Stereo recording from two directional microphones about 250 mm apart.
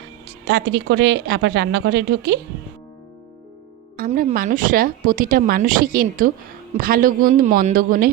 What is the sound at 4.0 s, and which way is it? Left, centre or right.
Speech, right.